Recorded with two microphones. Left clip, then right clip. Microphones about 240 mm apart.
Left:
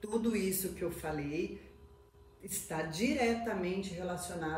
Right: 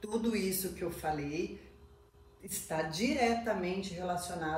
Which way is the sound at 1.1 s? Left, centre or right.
Right.